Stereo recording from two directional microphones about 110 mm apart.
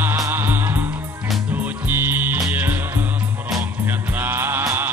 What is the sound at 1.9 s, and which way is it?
Music, 20° right (ahead or behind).